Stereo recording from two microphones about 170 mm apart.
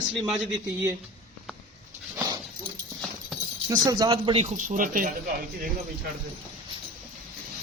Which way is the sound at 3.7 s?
25° right (ahead or behind).